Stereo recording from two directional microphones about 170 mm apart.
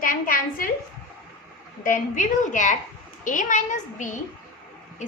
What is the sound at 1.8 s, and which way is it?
A woman's voice, 50° left (ahead or behind).